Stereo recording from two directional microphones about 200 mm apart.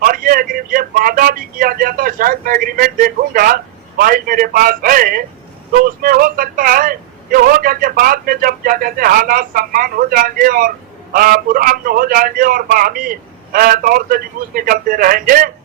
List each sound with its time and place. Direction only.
0.0 s speech: 45° right (ahead or behind)